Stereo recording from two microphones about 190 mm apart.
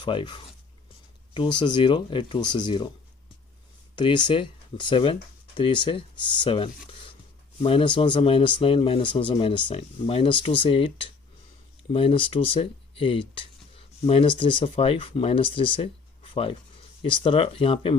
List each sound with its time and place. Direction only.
0.0 s speech: 25° left (ahead or behind)
1.5 s speech: 25° left (ahead or behind)
3.9 s speech: 25° left (ahead or behind)